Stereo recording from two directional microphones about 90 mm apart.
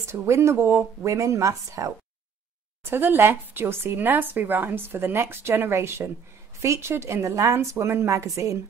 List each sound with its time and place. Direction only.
0.0 s a woman's voice: 30° right (ahead or behind)
2.8 s a woman's voice: 25° right (ahead or behind)